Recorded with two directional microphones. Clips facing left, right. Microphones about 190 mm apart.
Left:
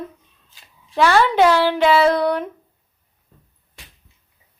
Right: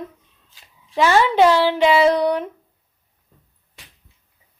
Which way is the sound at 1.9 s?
15° right (ahead or behind).